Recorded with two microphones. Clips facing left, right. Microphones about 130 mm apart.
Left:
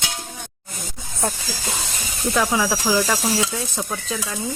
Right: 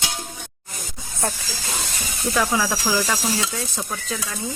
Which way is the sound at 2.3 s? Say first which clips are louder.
Left 1 dB; 10° left (ahead or behind).